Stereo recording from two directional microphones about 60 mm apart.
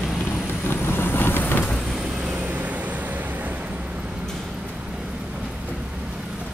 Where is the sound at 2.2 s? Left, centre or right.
Right.